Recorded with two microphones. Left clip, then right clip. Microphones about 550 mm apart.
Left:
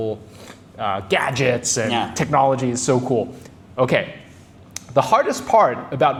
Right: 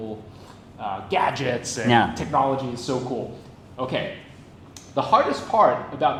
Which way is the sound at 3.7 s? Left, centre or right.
Left.